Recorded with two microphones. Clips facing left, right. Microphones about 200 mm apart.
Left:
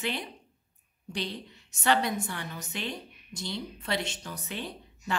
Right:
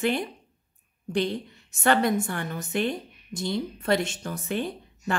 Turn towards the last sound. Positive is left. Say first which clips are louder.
# right 6 dB
turn(degrees=-50)  # may be behind; listen again after turning